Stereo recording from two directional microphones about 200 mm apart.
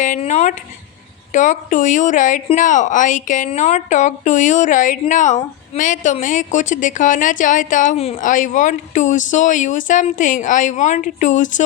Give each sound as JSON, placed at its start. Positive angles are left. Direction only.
{"t": 0.0, "sound": "a woman's voice", "side_deg": 40}